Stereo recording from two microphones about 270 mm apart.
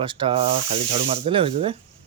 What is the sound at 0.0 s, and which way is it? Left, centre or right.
Speech, centre.